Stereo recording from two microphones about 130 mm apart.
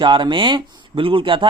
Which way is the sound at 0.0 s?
35° right (ahead or behind).